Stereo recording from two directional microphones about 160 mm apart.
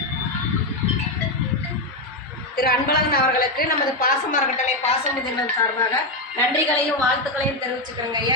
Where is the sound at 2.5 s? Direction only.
70° left (ahead or behind).